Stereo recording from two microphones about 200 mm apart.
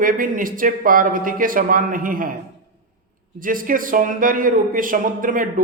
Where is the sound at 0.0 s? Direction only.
45° right (ahead or behind).